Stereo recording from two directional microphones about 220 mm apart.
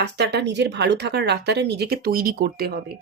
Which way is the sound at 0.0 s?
50° right (ahead or behind).